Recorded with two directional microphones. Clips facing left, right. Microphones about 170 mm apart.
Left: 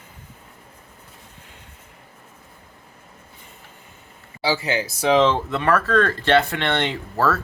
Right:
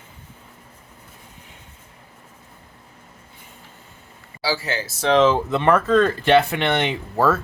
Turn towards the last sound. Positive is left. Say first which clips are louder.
# right 2 dB
turn(degrees=-15)  # may be behind; listen again after turning